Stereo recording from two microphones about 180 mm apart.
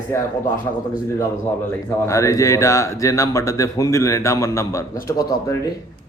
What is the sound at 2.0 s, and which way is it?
Speech, 15° left (ahead or behind).